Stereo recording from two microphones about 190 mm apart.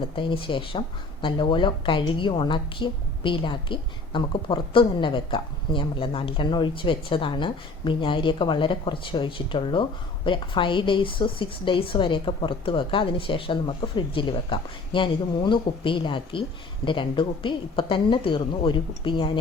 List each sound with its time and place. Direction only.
0.0 s speech: 25° left (ahead or behind)